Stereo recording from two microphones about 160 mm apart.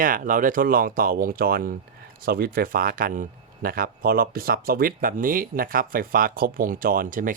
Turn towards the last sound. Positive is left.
turn(degrees=-60)  # may be behind; listen again after turning